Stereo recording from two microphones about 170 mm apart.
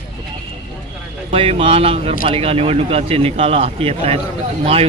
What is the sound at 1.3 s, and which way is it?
Speech, 35° right (ahead or behind).